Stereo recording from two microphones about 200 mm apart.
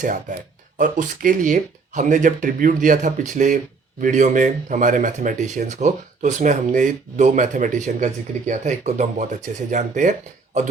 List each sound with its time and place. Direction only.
0.0 s speech: 40° right (ahead or behind)